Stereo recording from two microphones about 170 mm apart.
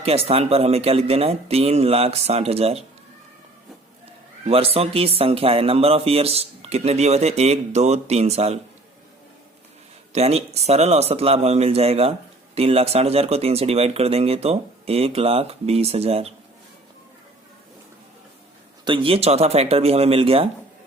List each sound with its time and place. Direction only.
0.0 s speech: 35° right (ahead or behind)
4.4 s speech: 35° right (ahead or behind)
10.1 s speech: 40° right (ahead or behind)
18.9 s speech: 30° right (ahead or behind)